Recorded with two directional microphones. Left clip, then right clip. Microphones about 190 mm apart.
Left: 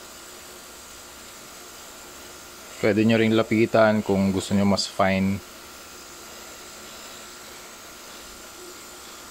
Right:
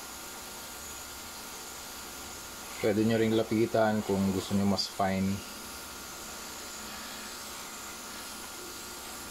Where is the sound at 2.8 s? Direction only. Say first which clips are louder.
Left 7 dB; 40° left (ahead or behind).